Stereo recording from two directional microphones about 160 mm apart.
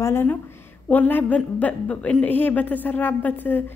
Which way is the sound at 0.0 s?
15° left (ahead or behind).